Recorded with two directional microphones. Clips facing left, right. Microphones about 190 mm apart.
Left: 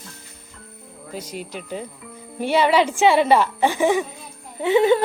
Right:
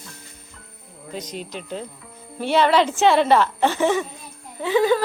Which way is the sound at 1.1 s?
10° left (ahead or behind).